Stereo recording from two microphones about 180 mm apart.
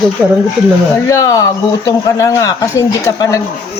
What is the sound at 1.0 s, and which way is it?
Speech, 20° left (ahead or behind).